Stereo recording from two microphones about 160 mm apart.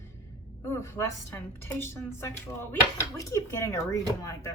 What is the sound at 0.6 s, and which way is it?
Speech, 15° left (ahead or behind).